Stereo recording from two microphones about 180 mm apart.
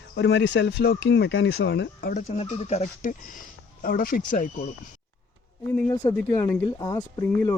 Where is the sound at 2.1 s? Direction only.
35° left (ahead or behind).